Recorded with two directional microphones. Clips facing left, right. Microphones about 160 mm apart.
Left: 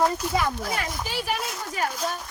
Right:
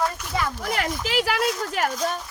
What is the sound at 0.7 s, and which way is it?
Speech, 90° right.